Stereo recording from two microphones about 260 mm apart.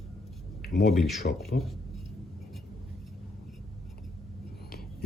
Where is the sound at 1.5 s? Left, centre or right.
Left.